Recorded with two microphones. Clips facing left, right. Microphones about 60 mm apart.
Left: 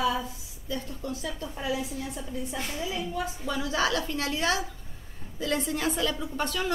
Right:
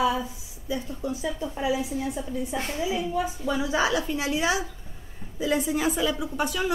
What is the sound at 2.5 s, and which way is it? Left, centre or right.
Speech, right.